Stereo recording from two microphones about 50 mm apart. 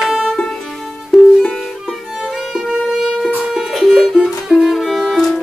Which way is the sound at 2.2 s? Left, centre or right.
Centre.